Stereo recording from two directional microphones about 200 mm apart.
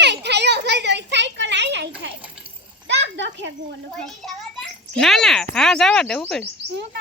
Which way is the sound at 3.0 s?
65° right (ahead or behind).